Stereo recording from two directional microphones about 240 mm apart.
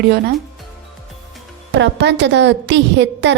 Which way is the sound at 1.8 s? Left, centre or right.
Right.